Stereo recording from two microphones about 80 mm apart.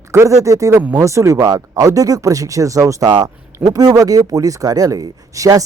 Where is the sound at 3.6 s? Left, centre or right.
Right.